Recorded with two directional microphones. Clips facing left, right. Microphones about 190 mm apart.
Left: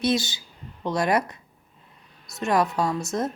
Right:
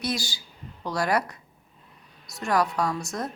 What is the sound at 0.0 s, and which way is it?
A woman's voice, 25° left (ahead or behind).